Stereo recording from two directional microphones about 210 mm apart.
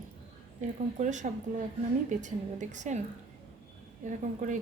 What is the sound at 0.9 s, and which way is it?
A woman's voice, 35° right (ahead or behind).